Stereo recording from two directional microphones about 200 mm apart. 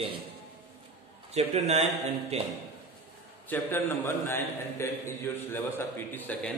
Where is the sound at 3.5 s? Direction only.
10° left (ahead or behind).